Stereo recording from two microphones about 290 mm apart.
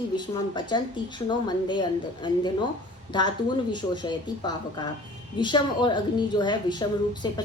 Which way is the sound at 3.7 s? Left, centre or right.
Centre.